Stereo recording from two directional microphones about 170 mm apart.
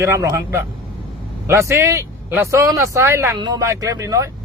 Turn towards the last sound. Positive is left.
turn(degrees=-20)  # may be behind; listen again after turning